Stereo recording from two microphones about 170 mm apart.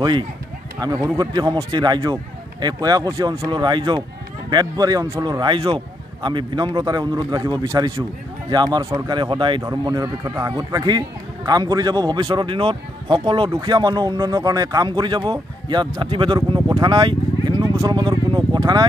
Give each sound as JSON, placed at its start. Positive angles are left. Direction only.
{"t": 0.7, "sound": "speech", "side_deg": -25}